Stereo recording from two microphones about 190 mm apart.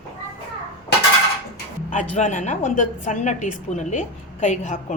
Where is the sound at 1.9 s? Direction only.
40° left (ahead or behind).